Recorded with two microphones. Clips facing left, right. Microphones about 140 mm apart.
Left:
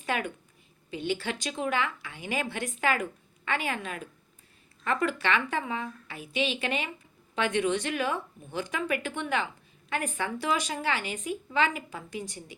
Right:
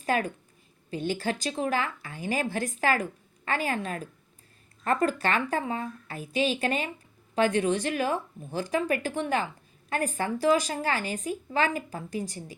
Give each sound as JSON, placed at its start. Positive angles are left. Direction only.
{"t": 0.0, "sound": "a woman's voice", "side_deg": -40}